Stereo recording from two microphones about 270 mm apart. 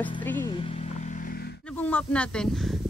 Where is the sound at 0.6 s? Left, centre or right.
Left.